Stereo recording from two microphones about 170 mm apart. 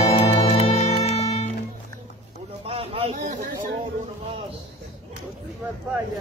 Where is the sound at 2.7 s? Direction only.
35° right (ahead or behind).